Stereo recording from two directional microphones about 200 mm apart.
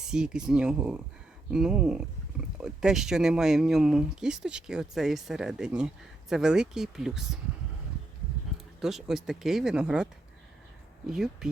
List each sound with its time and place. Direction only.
0.1 s speech: 5° right (ahead or behind)
8.8 s speech: centre (ahead or behind)